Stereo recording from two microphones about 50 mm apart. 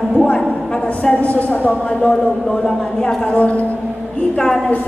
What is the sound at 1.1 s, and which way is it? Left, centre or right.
Speech, left.